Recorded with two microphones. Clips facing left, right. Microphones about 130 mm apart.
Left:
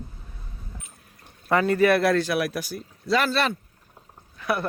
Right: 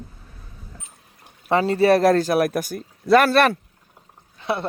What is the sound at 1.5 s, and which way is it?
Speech, 25° right (ahead or behind).